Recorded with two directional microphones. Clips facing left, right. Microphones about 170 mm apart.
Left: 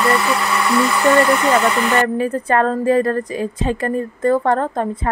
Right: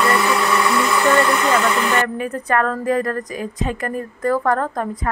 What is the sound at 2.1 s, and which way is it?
Speech, 30° left (ahead or behind).